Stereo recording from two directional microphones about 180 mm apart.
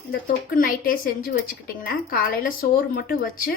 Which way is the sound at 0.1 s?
50° left (ahead or behind).